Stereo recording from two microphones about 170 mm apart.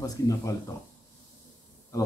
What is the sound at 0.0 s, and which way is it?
Speech, 20° left (ahead or behind).